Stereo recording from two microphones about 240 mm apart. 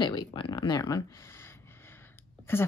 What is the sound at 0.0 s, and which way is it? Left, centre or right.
Speech, centre.